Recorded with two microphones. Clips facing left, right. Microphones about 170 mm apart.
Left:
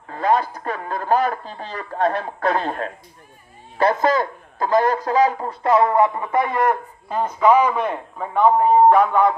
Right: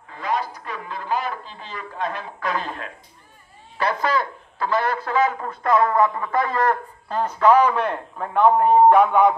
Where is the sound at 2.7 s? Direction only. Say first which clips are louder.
Left 7 dB; 45° left (ahead or behind).